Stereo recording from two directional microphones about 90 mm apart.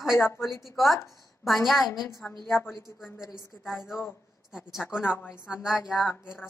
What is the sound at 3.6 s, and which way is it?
A woman's voice, 5° right (ahead or behind).